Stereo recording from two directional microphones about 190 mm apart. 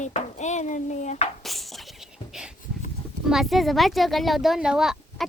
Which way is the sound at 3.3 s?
Centre (ahead or behind).